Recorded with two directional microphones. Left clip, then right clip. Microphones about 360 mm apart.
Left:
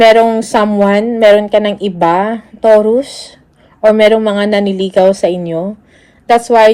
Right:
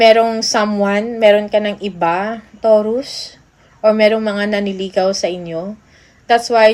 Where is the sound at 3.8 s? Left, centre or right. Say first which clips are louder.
Left 5 dB; left.